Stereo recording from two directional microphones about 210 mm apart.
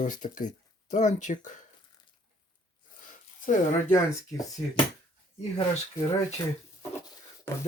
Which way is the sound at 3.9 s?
15° left (ahead or behind).